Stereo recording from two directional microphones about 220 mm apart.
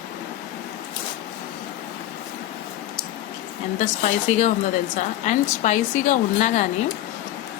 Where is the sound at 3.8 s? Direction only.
30° left (ahead or behind).